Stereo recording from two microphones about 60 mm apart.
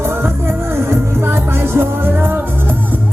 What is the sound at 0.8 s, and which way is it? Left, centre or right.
Music, right.